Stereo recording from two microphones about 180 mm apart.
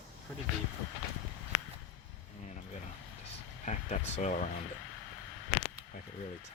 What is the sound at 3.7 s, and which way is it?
Speech, 40° left (ahead or behind).